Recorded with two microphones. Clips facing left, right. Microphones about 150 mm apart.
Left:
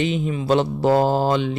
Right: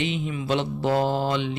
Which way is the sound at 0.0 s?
40° left (ahead or behind).